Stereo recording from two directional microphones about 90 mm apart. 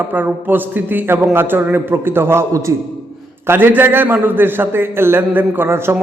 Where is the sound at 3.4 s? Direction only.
25° right (ahead or behind).